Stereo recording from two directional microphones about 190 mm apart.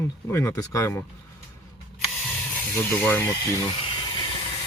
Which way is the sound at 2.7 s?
10° left (ahead or behind).